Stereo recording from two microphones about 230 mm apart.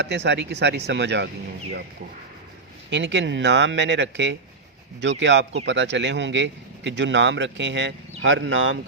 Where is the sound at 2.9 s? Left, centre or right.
Right.